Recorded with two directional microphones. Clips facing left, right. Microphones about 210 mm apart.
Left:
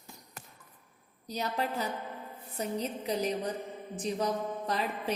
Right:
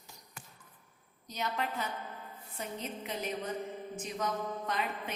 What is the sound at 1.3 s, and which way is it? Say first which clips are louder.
A woman's voice: left 3 dB; 35° left (ahead or behind).